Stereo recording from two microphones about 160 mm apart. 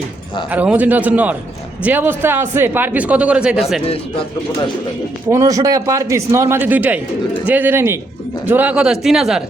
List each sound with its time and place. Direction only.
0.5 s a man's voice: 10° right (ahead or behind)
3.8 s speech: 35° left (ahead or behind)
5.3 s a man's voice: 20° right (ahead or behind); by 9.4 s centre (ahead or behind)